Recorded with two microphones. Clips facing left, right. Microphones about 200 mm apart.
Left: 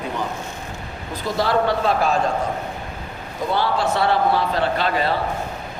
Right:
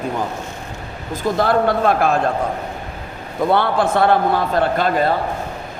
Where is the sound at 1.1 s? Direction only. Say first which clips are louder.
Right 4 dB; 55° right (ahead or behind).